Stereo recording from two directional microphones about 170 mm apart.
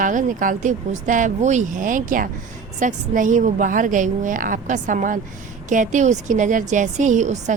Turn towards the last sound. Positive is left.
turn(degrees=-45)  # may be behind; listen again after turning